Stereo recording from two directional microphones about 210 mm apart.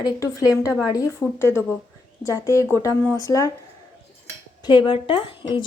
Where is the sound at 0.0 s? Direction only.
15° left (ahead or behind).